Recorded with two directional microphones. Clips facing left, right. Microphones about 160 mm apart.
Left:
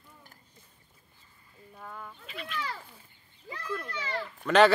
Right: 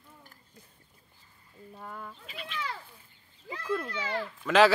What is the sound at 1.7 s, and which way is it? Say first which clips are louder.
Speech: right 1 dB; 25° right (ahead or behind).